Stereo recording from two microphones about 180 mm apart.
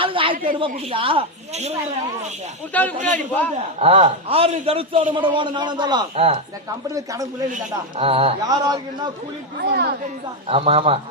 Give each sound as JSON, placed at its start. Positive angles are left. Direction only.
{"t": 0.0, "sound": "a woman's voice", "side_deg": -30}
{"t": 2.7, "sound": "a man's voice", "side_deg": 10}
{"t": 3.8, "sound": "a man's voice", "side_deg": -35}
{"t": 6.9, "sound": "a man's voice", "side_deg": -20}
{"t": 7.5, "sound": "a man's voice", "side_deg": -30}
{"t": 8.4, "sound": "a man's voice", "side_deg": -20}
{"t": 9.6, "sound": "a woman's voice", "side_deg": -65}
{"t": 10.5, "sound": "a man's voice", "side_deg": -30}